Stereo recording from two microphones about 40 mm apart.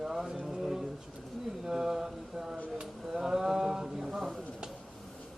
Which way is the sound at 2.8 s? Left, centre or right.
Centre.